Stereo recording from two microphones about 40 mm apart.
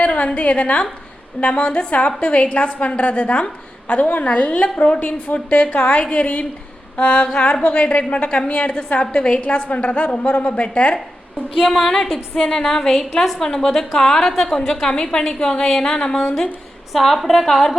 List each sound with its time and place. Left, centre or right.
0.0 s a woman's voice: left
6.9 s a sound: left
7.6 s a woman's voice: left
8.4 s a woman's voice: left
8.9 s a woman's voice: left
10.1 s a sound: left
10.6 s a woman's voice: left
11.8 s a woman's voice: centre
16.9 s a woman's voice: centre